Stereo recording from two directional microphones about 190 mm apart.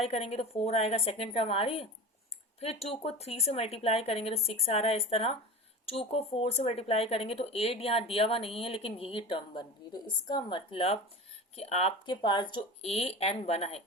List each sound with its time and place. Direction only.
0.0 s speech: 35° left (ahead or behind)